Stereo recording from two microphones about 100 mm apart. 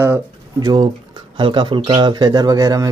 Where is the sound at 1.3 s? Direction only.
50° right (ahead or behind).